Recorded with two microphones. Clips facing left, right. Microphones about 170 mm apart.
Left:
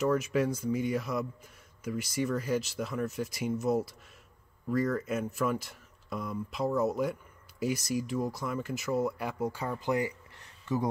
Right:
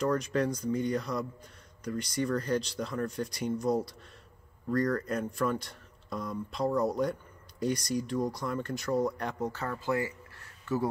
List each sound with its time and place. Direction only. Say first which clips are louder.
0.0 s speech: left 1 dB; 5° left (ahead or behind)